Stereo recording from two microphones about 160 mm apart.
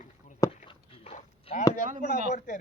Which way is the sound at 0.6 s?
40° left (ahead or behind).